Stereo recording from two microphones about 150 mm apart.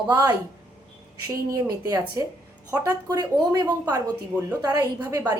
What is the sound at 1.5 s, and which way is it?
A woman's voice, 25° right (ahead or behind).